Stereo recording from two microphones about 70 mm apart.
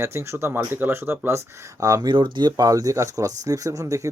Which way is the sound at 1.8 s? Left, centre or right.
Right.